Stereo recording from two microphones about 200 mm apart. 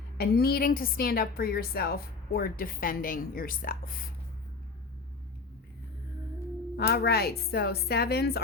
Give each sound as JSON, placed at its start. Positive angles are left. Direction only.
{"t": 0.2, "sound": "a woman's voice", "side_deg": 50}
{"t": 6.7, "sound": "a woman's voice", "side_deg": 50}